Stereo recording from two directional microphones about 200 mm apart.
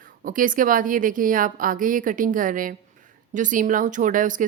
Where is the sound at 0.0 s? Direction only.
40° right (ahead or behind).